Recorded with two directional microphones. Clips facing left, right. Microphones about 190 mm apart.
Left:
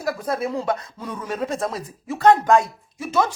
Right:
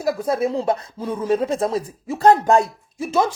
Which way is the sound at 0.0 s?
30° right (ahead or behind).